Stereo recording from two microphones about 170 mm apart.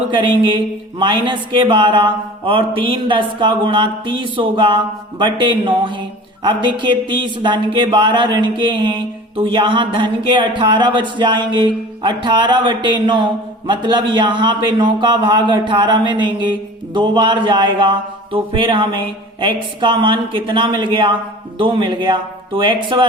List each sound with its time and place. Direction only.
0.1 s a man's voice: 30° right (ahead or behind)